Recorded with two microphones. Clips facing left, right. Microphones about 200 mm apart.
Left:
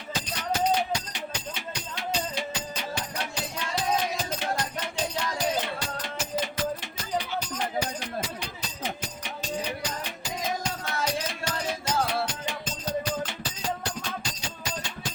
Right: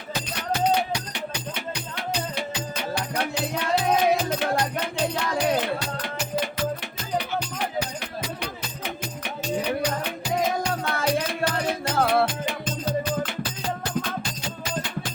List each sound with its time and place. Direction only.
1.1 s music: 60° right (ahead or behind)
8.4 s music: 60° right (ahead or behind)